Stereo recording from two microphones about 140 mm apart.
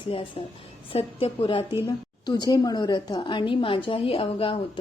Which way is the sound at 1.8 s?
30° left (ahead or behind).